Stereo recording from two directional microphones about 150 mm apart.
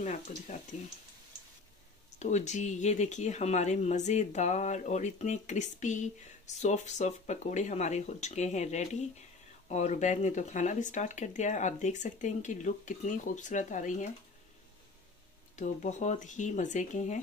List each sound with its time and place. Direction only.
0.3 s speech: 55° left (ahead or behind)
2.1 s speech: 50° left (ahead or behind)
15.5 s speech: 55° left (ahead or behind)